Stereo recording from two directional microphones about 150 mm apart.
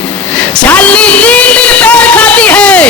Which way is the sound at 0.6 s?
10° left (ahead or behind).